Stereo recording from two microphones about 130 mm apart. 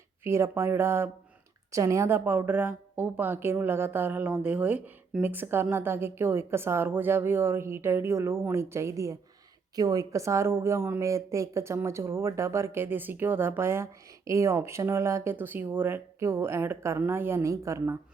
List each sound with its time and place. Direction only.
0.3 s a woman's voice: 20° right (ahead or behind)